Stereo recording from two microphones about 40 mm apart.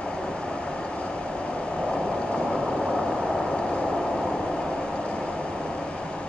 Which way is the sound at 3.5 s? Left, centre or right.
Centre.